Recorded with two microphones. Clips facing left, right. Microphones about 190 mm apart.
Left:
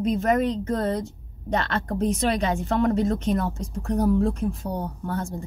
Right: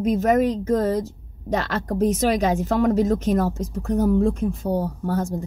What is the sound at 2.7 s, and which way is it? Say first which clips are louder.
Speech: right 2 dB; 40° right (ahead or behind).